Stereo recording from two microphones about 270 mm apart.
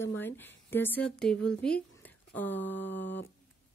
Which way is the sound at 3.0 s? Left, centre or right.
Left.